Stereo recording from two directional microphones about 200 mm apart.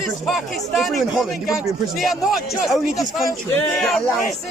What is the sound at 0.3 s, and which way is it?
Speech, centre (ahead or behind).